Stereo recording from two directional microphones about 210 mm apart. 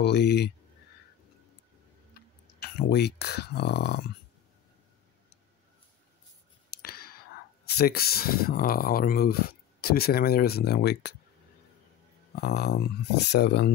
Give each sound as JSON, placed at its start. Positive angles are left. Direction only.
{"t": 0.0, "sound": "speech", "side_deg": 55}
{"t": 2.6, "sound": "speech", "side_deg": 50}
{"t": 6.7, "sound": "speech", "side_deg": 45}
{"t": 12.4, "sound": "speech", "side_deg": 50}